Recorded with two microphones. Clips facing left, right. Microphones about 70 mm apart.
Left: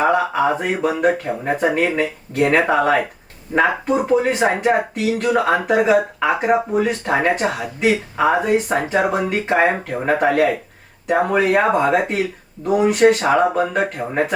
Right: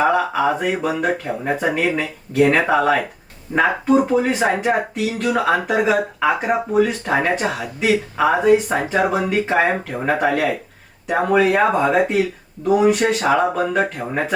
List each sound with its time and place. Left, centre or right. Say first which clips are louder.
0.0 s speech: even; centre